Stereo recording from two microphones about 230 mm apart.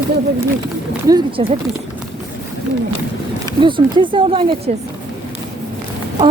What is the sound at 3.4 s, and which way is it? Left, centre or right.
Speech, right.